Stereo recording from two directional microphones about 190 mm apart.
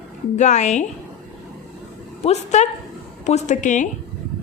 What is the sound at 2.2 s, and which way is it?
A woman's voice, 35° left (ahead or behind).